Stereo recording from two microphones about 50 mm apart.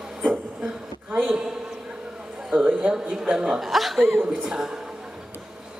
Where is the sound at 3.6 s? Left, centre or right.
Centre.